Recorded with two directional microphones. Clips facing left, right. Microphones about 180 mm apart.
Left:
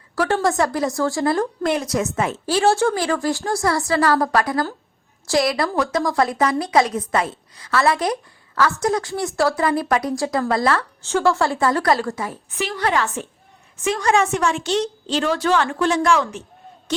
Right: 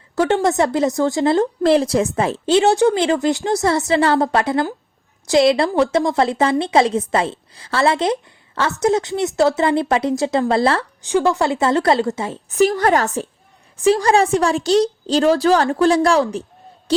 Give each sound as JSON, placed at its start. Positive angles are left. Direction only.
{"t": 0.2, "sound": "a woman's voice", "side_deg": -20}
{"t": 11.0, "sound": "a woman's voice", "side_deg": -15}
{"t": 12.5, "sound": "a woman's voice", "side_deg": -45}
{"t": 13.8, "sound": "a woman's voice", "side_deg": -35}